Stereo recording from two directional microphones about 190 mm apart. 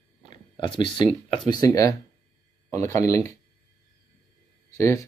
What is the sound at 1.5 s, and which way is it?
Speech, 20° left (ahead or behind).